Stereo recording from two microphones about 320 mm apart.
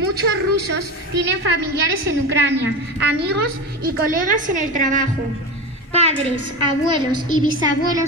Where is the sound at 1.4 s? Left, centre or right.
Right.